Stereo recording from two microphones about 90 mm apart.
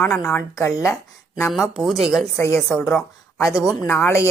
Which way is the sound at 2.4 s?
30° left (ahead or behind).